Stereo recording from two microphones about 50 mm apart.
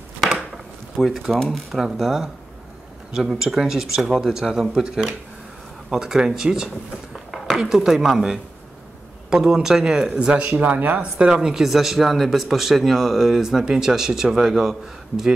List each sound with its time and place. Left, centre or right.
0.9 s speech: centre
1.3 s speech: centre
1.7 s speech: centre
7.2 s speech: centre
10.1 s speech: right
11.0 s speech: centre